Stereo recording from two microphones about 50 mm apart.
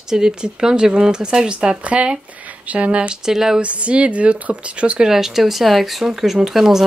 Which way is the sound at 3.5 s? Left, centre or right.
Right.